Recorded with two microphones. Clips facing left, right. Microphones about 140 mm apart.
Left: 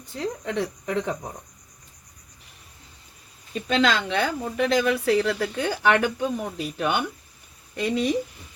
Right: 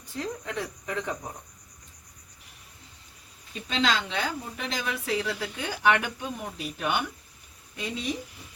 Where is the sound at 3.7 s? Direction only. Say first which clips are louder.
Left 5 dB; 55° left (ahead or behind).